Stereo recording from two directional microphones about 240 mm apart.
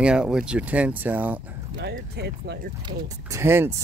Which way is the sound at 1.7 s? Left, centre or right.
Right.